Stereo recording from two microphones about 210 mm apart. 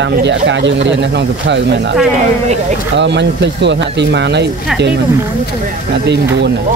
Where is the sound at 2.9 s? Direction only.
55° right (ahead or behind).